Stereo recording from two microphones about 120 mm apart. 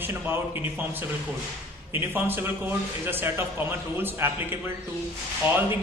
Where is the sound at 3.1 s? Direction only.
15° right (ahead or behind).